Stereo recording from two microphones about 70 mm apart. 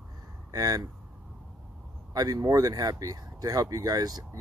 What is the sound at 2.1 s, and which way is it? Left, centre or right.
Speech, right.